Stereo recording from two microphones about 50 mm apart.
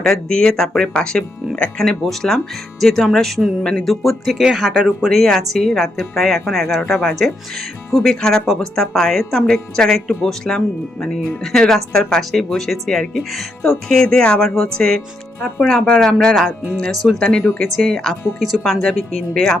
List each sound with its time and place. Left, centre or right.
0.0 s speech: centre
4.5 s speech: centre
5.0 s speech: centre
8.1 s speech: centre
17.2 s speech: centre
17.6 s speech: centre
18.9 s speech: centre